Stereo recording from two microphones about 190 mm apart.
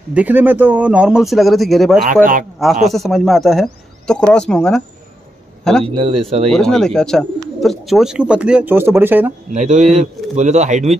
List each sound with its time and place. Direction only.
0.1 s a man's voice: 10° right (ahead or behind)
5.9 s speech: 30° right (ahead or behind)
6.5 s speech: centre (ahead or behind)
9.5 s speech: 40° right (ahead or behind)